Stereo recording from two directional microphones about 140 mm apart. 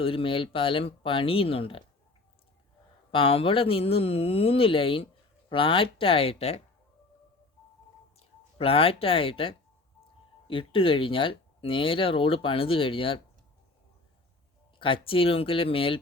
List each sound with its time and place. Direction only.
0.0 s speech: 40° left (ahead or behind)
3.1 s speech: 40° left (ahead or behind)
8.5 s speech: 45° left (ahead or behind)
14.8 s speech: 40° left (ahead or behind)